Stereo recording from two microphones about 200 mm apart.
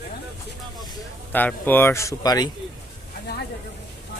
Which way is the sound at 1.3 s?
10° left (ahead or behind).